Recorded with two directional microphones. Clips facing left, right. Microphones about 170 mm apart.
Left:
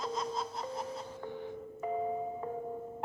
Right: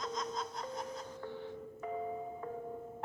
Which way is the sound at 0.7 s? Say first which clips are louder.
Left 3 dB; 30° left (ahead or behind).